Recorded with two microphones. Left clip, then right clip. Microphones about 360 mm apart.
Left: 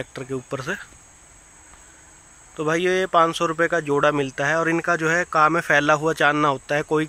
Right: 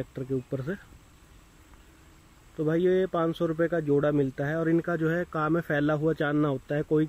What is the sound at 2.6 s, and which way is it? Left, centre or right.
Speech, left.